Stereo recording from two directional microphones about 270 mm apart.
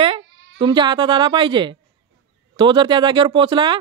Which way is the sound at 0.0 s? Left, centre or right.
Centre.